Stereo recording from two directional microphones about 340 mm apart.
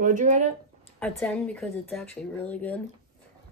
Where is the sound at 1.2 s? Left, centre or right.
Centre.